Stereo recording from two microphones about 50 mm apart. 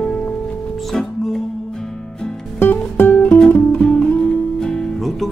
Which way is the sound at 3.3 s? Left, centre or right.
Left.